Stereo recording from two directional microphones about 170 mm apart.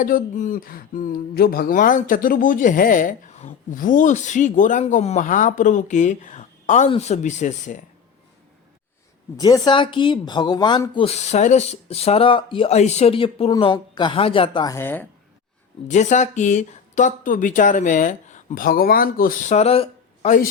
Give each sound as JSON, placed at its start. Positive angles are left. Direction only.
{"t": 0.0, "sound": "speech", "side_deg": 50}
{"t": 9.4, "sound": "speech", "side_deg": 25}
{"t": 15.9, "sound": "speech", "side_deg": 45}